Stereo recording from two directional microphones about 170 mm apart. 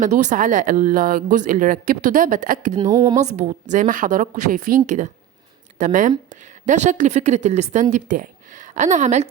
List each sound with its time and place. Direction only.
0.0 s speech: 45° right (ahead or behind)
2.7 s speech: 20° right (ahead or behind)
3.2 s speech: 45° right (ahead or behind)